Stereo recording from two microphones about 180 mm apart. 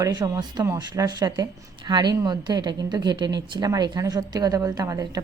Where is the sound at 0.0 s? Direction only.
20° right (ahead or behind).